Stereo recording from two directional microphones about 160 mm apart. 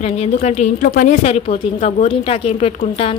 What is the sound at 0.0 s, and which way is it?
A woman's voice, 40° left (ahead or behind).